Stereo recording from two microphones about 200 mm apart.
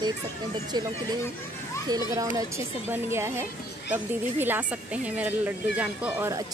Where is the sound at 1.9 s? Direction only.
15° right (ahead or behind).